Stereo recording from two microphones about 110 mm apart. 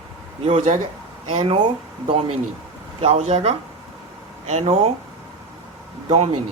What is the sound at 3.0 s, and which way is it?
Speech, 70° right (ahead or behind).